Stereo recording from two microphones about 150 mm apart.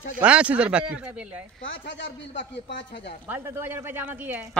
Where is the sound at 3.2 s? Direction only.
15° right (ahead or behind).